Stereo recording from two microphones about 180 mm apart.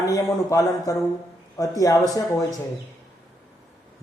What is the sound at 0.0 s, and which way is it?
A man's voice, 20° left (ahead or behind).